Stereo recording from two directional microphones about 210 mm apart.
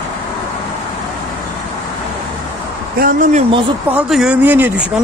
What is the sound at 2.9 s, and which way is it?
Speech, 40° right (ahead or behind).